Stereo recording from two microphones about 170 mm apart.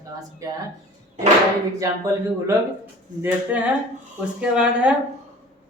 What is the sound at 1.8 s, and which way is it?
Speech, 20° right (ahead or behind).